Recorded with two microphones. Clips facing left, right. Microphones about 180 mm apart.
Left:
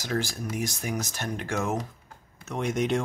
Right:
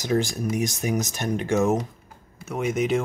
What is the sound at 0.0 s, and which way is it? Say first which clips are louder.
Speech: right 6 dB; 15° right (ahead or behind).